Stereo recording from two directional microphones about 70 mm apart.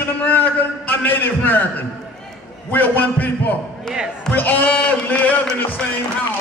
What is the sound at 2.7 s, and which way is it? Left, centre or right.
A man's voice, left.